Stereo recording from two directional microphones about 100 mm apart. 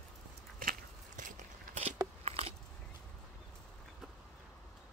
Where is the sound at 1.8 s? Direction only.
90° right.